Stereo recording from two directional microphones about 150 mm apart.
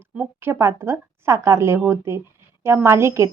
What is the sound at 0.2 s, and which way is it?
A woman's voice, 15° right (ahead or behind).